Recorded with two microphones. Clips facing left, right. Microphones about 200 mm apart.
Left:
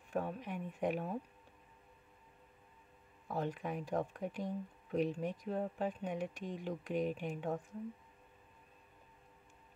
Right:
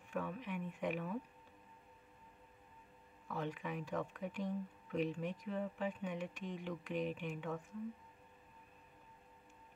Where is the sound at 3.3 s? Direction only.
45° left (ahead or behind).